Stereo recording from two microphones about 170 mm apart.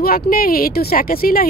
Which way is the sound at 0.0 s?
60° left (ahead or behind).